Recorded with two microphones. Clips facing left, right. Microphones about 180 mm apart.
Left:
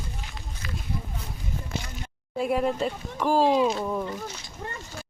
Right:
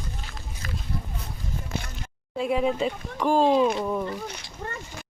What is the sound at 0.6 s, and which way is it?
Run, 45° right (ahead or behind).